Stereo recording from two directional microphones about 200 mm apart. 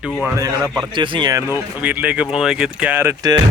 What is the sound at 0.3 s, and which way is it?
Speech, 15° right (ahead or behind).